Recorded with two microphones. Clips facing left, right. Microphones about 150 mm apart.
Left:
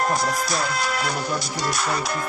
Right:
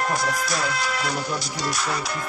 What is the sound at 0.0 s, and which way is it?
Music, 40° left (ahead or behind).